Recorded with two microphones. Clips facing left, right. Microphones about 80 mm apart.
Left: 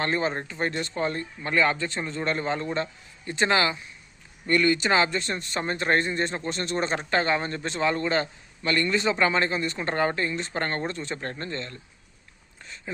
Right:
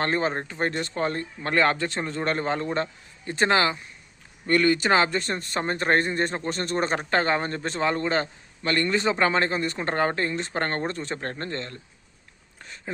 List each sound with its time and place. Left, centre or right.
0.0 s speech: right
1.5 s a man's voice: right